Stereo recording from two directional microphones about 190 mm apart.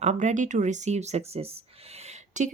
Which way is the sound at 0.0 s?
40° right (ahead or behind).